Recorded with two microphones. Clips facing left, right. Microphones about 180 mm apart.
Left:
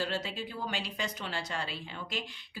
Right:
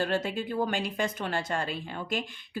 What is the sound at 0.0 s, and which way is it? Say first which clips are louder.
A woman's voice: right 6 dB; 55° right (ahead or behind).